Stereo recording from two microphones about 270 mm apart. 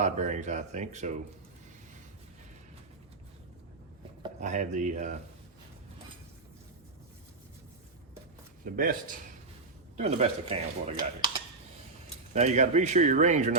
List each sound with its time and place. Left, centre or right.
0.0 s speech: right
4.2 s speech: right
8.6 s speech: right
12.3 s speech: right